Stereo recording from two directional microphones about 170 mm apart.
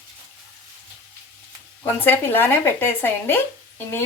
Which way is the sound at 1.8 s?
10° left (ahead or behind).